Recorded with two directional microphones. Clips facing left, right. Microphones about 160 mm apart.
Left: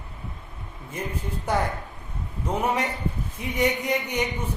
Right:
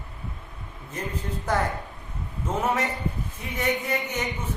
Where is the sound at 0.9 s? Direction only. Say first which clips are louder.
Even; 10° left (ahead or behind).